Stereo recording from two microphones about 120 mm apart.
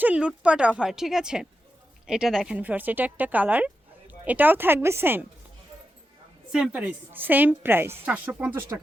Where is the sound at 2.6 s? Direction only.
15° right (ahead or behind).